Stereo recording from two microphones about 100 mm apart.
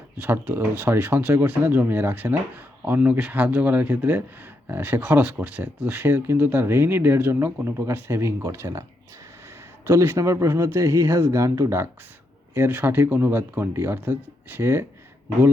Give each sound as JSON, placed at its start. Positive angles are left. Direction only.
{"t": 0.2, "sound": "speech", "side_deg": -20}
{"t": 9.8, "sound": "speech", "side_deg": -25}